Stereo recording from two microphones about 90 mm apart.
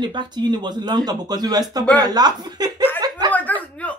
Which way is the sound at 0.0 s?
55° right (ahead or behind).